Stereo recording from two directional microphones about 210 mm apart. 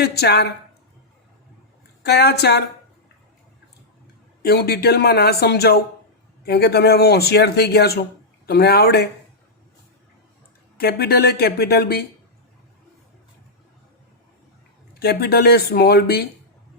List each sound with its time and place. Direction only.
0.0 s speech: 50° left (ahead or behind)
2.0 s speech: 50° left (ahead or behind)
4.4 s speech: 50° left (ahead or behind)
10.8 s speech: 50° left (ahead or behind)
14.9 s speech: 50° left (ahead or behind)